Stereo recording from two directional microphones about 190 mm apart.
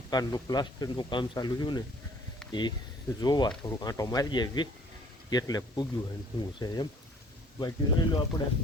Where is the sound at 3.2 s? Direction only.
20° left (ahead or behind).